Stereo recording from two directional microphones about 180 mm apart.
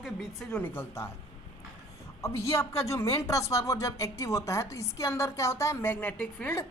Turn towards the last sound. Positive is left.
turn(degrees=5)  # may be behind; listen again after turning